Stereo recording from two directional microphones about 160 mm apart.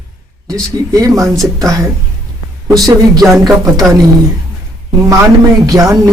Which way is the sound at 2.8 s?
25° right (ahead or behind).